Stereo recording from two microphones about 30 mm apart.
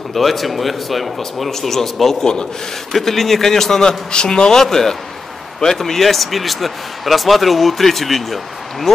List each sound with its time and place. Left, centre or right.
0.1 s a man's voice: centre